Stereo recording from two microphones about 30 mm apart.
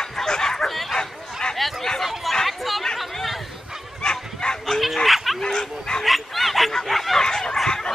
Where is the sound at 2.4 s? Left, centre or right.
Centre.